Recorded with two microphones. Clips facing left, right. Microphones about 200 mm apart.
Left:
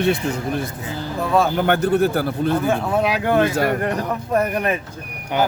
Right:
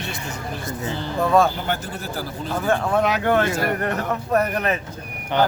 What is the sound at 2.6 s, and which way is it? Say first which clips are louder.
Speech: left 1 dB; 5° left (ahead or behind).